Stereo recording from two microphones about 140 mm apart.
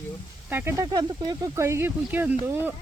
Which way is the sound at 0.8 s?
30° right (ahead or behind).